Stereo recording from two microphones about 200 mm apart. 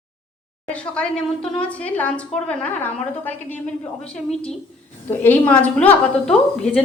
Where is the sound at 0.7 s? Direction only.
5° left (ahead or behind).